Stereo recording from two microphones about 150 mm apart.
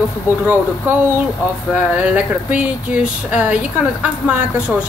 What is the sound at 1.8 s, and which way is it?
Speech, 10° right (ahead or behind).